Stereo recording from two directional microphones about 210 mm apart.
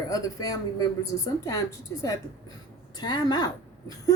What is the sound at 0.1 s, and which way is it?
A woman's voice, 15° left (ahead or behind).